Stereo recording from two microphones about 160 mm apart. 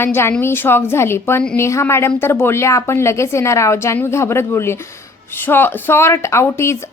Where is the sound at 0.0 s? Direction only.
15° left (ahead or behind).